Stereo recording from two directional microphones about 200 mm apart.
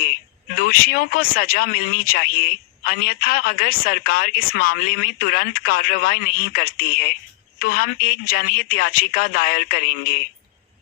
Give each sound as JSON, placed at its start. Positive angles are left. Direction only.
{"t": 0.7, "sound": "speech", "side_deg": 50}